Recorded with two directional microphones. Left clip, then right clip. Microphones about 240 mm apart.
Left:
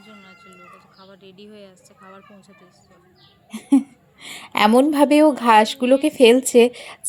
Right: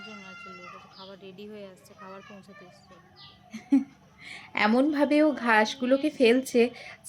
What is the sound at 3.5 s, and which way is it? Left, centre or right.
A woman's voice, left.